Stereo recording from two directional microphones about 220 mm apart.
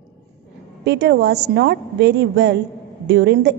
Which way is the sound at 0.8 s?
50° right (ahead or behind).